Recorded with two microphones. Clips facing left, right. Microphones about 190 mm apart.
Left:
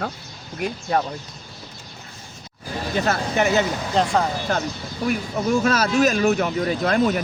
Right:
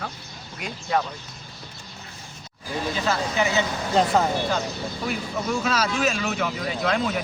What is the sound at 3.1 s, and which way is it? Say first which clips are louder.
Speech: left 4 dB; 55° left (ahead or behind).